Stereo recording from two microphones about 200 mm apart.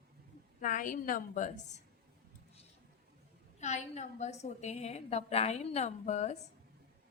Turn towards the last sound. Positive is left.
turn(degrees=35)  # may be behind; listen again after turning